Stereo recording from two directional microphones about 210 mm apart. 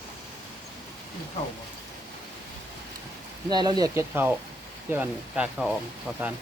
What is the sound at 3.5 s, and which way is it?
Speech, 20° right (ahead or behind).